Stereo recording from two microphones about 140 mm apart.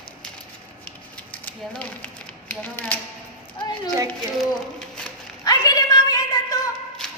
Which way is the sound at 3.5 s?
35° left (ahead or behind).